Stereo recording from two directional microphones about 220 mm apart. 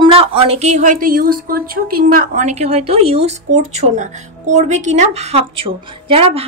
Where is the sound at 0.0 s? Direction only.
25° right (ahead or behind).